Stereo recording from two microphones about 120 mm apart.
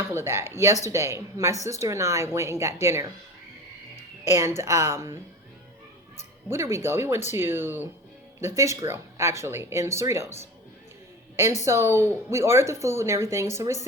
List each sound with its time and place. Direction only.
0.1 s a woman's voice: 20° right (ahead or behind)
4.3 s a woman's voice: 20° right (ahead or behind)
6.5 s a woman's voice: 20° right (ahead or behind)
11.6 s a woman's voice: 25° right (ahead or behind)